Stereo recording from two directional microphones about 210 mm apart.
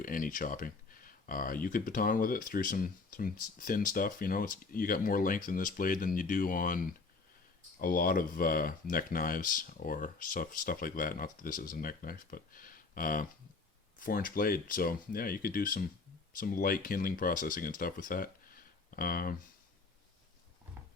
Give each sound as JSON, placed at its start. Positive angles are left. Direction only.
{"t": 0.0, "sound": "speech", "side_deg": 40}